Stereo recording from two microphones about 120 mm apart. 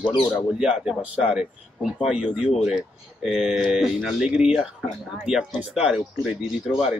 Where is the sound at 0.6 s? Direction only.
5° right (ahead or behind).